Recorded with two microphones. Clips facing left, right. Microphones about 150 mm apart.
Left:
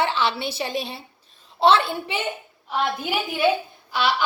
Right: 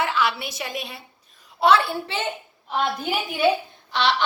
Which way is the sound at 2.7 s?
Centre (ahead or behind).